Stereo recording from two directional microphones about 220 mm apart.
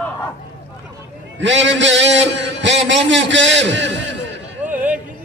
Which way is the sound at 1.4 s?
55° right (ahead or behind).